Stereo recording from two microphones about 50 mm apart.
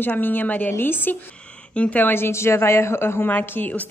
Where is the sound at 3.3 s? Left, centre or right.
Left.